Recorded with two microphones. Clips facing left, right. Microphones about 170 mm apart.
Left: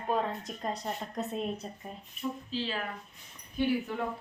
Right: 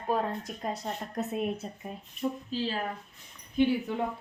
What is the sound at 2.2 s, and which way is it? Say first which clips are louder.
Speech: right 3 dB; 45° right (ahead or behind).